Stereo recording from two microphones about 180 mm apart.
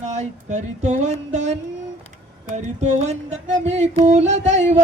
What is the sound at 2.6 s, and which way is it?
Music, 40° right (ahead or behind).